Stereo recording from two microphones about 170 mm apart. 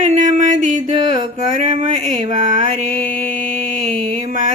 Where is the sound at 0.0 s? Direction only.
45° right (ahead or behind).